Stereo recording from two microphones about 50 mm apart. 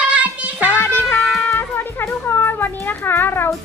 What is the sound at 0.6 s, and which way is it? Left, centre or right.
Music, left.